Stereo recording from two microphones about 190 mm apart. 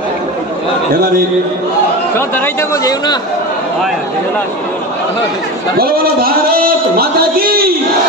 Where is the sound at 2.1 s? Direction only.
10° left (ahead or behind).